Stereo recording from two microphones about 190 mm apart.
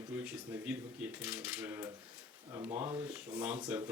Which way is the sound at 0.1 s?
10° right (ahead or behind).